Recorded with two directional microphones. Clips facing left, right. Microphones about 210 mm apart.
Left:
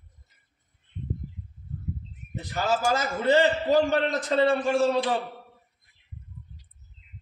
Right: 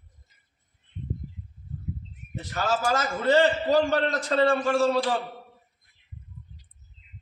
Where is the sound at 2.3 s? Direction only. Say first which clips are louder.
Left 1 dB; 15° left (ahead or behind).